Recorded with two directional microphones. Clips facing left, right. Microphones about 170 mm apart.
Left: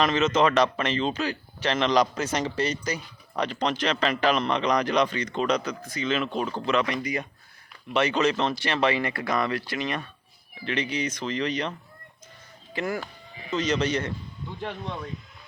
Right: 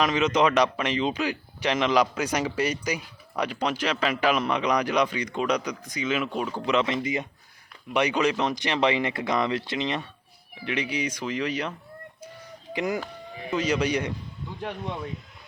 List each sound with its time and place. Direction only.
0.0 s speech: 10° right (ahead or behind)
6.7 s speech: 20° right (ahead or behind)
10.7 s speech: 10° right (ahead or behind)
12.7 s speech: 15° right (ahead or behind)